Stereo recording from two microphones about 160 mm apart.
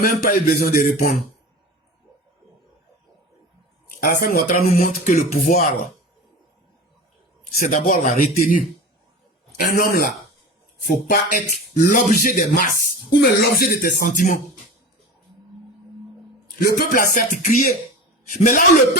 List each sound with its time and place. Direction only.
0.0 s speech: 60° left (ahead or behind)
4.0 s speech: 65° left (ahead or behind)
7.6 s speech: 55° left (ahead or behind)
9.6 s speech: 70° left (ahead or behind)
16.6 s speech: 65° left (ahead or behind)